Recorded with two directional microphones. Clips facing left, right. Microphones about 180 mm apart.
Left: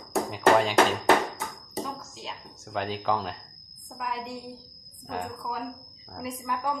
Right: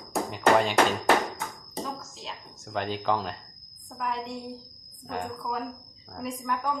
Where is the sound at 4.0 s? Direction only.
5° left (ahead or behind).